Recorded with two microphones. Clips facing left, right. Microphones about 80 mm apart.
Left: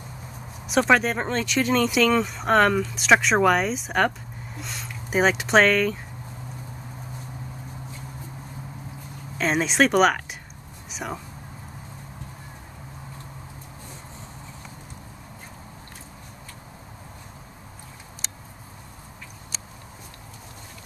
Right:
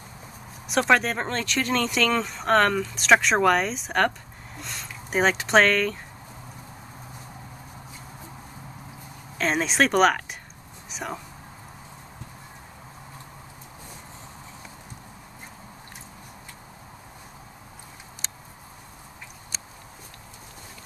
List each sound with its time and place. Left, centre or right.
0.7 s speech: centre
9.4 s speech: centre
10.9 s whispering: centre